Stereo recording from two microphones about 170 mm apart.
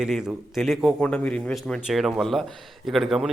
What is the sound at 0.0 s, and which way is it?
A man's voice, 5° right (ahead or behind).